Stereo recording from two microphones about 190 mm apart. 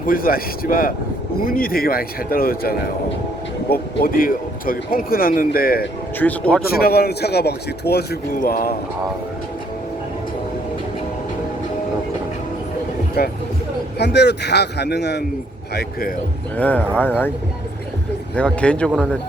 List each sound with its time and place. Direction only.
0.0 s speech: 50° left (ahead or behind)
6.1 s speech: 10° left (ahead or behind)
6.7 s a man's voice: 55° left (ahead or behind)
13.2 s a man's voice: 55° left (ahead or behind)
16.6 s speech: 10° left (ahead or behind)
18.3 s speech: 5° left (ahead or behind)